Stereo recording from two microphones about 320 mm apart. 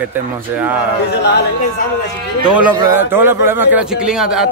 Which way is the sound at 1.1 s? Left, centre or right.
Left.